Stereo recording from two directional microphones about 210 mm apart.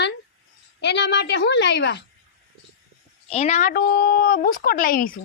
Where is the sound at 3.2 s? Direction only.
30° left (ahead or behind).